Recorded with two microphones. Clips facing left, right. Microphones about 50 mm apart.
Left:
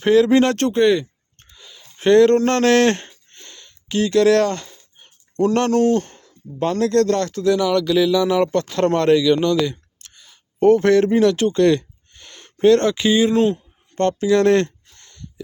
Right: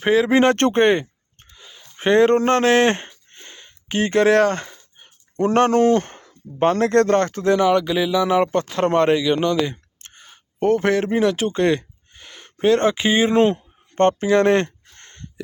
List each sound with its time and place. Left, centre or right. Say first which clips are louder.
0.0 s speech: left 2 dB; centre
0.5 s speech: even; right
1.4 s a sound: even; centre
2.0 s speech: left 2 dB; centre
3.2 s a sound: right 1 dB; centre
5.5 s speech: right 2 dB; right
10.6 s speech: left 5 dB; centre
13.1 s speech: right 1 dB; right
14.9 s a sound: right 1 dB; right